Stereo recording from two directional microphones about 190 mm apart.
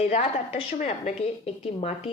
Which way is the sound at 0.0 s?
35° left (ahead or behind).